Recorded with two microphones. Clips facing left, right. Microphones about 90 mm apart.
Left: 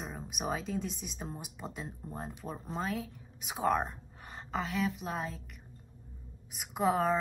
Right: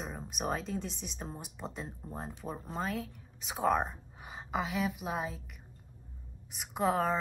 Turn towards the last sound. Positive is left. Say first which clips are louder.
# left 1 dB
turn(degrees=0)  # may be behind; listen again after turning